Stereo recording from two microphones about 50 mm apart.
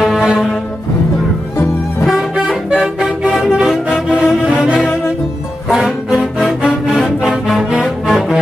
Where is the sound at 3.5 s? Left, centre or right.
Centre.